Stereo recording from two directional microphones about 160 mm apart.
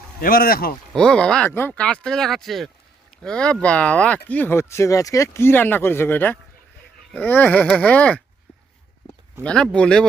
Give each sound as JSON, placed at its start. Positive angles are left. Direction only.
{"t": 0.2, "sound": "speech", "side_deg": 65}
{"t": 0.9, "sound": "speech", "side_deg": 5}
{"t": 9.4, "sound": "speech", "side_deg": 5}